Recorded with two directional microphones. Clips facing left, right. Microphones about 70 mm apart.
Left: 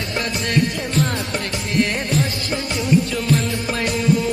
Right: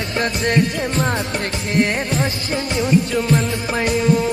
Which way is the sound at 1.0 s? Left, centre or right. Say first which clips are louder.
Left 1 dB; right.